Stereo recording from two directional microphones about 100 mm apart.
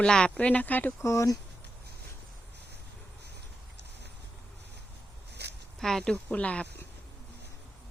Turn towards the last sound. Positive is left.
turn(degrees=15)  # may be behind; listen again after turning